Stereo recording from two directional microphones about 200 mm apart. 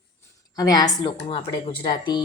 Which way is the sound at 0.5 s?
20° left (ahead or behind).